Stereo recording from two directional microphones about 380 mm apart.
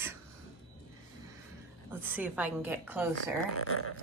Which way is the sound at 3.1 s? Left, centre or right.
Left.